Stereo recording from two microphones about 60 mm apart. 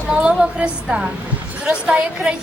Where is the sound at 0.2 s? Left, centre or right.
Centre.